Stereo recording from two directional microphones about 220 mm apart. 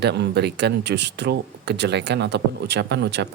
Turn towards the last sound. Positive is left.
turn(degrees=-50)  # may be behind; listen again after turning